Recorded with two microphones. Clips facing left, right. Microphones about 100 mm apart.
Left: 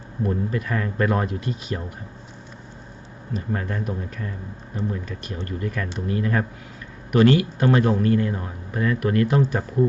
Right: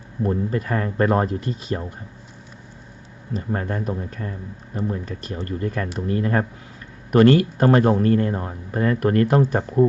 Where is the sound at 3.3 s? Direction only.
35° right (ahead or behind).